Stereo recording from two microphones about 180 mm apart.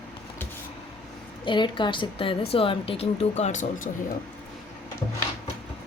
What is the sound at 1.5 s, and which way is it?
A woman's voice, 25° left (ahead or behind).